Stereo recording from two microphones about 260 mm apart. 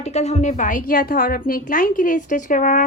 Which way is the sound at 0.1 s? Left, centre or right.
Left.